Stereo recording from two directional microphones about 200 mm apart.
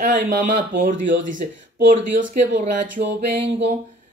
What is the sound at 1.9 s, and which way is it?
Speech, 40° right (ahead or behind).